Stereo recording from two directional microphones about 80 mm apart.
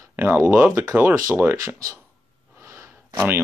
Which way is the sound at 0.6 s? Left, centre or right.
Right.